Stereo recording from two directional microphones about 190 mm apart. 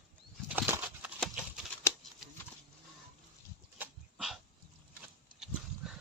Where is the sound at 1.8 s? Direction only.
15° left (ahead or behind).